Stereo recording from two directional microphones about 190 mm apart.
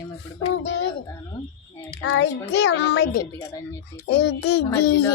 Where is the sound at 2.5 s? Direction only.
65° left (ahead or behind).